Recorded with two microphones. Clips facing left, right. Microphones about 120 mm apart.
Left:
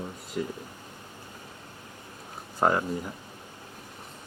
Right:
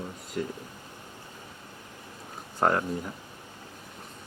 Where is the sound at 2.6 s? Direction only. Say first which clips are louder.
Left 1 dB; 5° left (ahead or behind).